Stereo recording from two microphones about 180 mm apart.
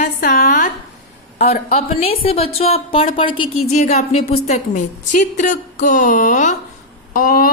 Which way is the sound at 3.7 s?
40° left (ahead or behind).